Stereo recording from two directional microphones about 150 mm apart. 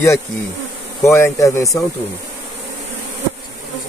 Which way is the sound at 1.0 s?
20° left (ahead or behind).